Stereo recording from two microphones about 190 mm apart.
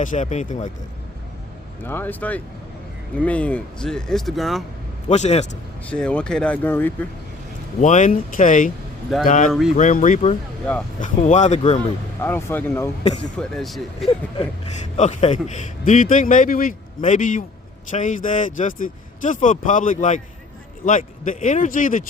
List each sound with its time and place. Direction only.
0.0 s speech: 40° left (ahead or behind)
1.8 s speech: 10° left (ahead or behind)
5.0 s speech: 35° left (ahead or behind)
5.9 s speech: 5° left (ahead or behind)
7.8 s a man's voice: 40° left (ahead or behind)
9.5 s speech: centre (ahead or behind)
9.7 s speech: 40° left (ahead or behind)
12.2 s speech: 10° left (ahead or behind)
13.1 s speech: 25° left (ahead or behind)
13.3 s speech: 5° left (ahead or behind)
14.9 s a man's voice: 35° left (ahead or behind)